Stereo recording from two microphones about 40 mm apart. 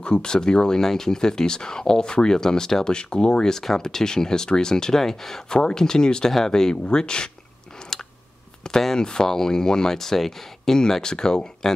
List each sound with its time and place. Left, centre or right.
0.0 s speech: left
7.9 s a sound: centre
8.6 s speech: centre